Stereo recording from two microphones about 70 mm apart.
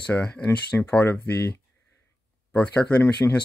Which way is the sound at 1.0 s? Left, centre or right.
Left.